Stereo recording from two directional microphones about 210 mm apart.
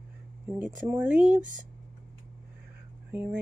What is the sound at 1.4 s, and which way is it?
Speech, 40° right (ahead or behind).